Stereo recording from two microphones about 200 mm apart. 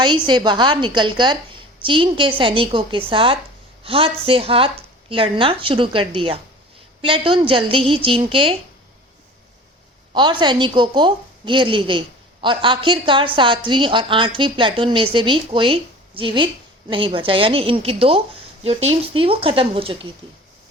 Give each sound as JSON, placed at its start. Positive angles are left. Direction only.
{"t": 0.0, "sound": "a woman's voice", "side_deg": -20}
{"t": 10.2, "sound": "a woman's voice", "side_deg": -20}